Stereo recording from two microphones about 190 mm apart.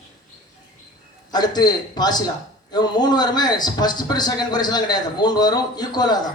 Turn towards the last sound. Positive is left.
turn(degrees=20)  # may be behind; listen again after turning